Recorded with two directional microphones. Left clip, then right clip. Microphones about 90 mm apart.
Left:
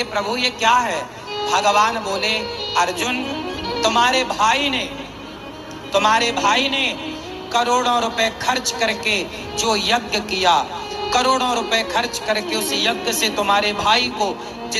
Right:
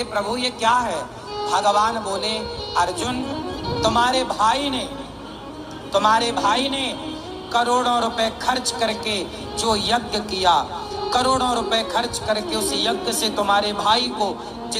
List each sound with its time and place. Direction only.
0.0 s a man's voice: 20° right (ahead or behind)
5.9 s a man's voice: 20° right (ahead or behind)